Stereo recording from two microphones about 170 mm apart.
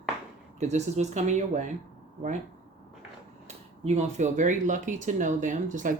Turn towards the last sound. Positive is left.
turn(degrees=-45)  # may be behind; listen again after turning